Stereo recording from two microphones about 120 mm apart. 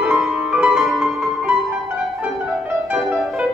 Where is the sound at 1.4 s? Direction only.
15° right (ahead or behind).